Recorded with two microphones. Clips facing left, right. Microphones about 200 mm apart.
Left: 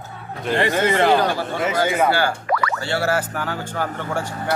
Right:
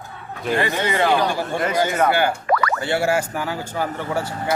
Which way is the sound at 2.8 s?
15° right (ahead or behind).